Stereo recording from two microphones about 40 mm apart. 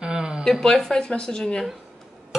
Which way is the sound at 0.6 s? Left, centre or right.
Centre.